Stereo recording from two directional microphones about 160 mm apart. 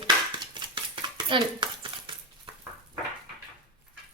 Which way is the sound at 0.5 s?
30° right (ahead or behind).